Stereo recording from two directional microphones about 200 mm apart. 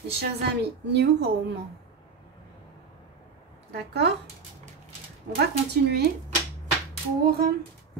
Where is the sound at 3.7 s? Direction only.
55° right (ahead or behind).